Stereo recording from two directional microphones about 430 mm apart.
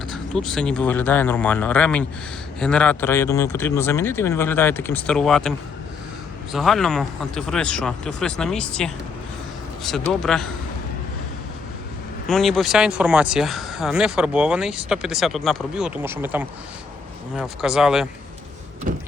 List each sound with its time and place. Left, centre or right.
0.1 s speech: centre
12.3 s speech: centre
18.9 s a sound: centre